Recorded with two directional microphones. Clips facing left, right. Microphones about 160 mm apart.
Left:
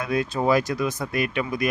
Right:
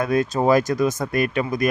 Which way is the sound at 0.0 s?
45° right (ahead or behind).